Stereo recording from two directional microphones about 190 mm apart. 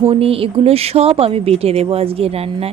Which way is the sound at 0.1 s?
30° right (ahead or behind).